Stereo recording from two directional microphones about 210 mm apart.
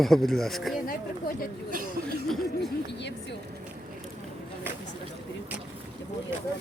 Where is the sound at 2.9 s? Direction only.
55° left (ahead or behind).